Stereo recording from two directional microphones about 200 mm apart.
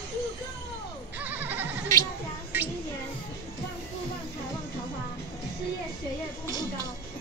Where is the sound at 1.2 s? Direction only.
10° right (ahead or behind).